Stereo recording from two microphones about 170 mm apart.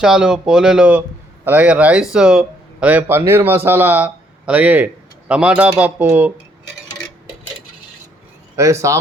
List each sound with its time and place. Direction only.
0.0 s speech: 5° right (ahead or behind)
8.5 s speech: 15° right (ahead or behind)